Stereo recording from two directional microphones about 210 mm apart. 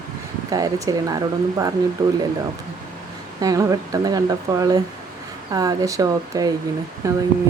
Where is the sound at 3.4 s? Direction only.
15° right (ahead or behind).